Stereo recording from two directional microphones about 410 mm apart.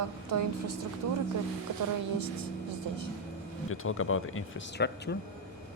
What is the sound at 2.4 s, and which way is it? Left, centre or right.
Speech, right.